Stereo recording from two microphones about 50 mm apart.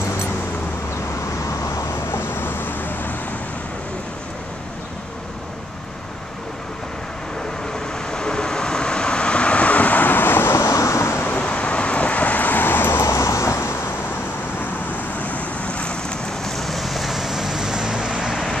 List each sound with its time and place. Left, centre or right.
2.0 s vehicle: left
8.1 s vehicle: centre; by 10.6 s left
10.6 s vehicle: left
11.4 s vehicle: left
13.0 s vehicle: left
14.6 s vehicle: left; by 18.3 s centre
18.3 s vehicle: centre